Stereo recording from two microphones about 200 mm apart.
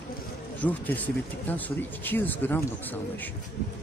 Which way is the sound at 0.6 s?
10° left (ahead or behind).